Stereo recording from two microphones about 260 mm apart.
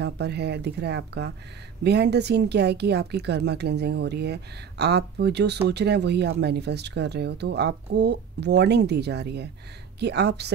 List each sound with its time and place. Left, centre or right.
0.0 s speech: right